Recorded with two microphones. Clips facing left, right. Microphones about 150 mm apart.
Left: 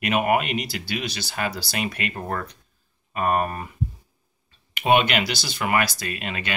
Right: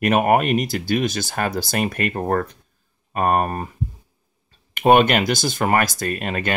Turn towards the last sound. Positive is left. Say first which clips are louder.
# right 6 dB
turn(degrees=-45)  # may be behind; listen again after turning